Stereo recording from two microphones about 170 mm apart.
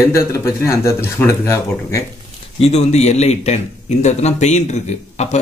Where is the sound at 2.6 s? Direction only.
40° left (ahead or behind).